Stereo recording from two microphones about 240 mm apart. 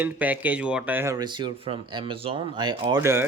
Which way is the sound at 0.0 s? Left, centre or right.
Centre.